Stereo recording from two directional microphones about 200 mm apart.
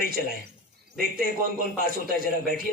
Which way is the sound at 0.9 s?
45° right (ahead or behind).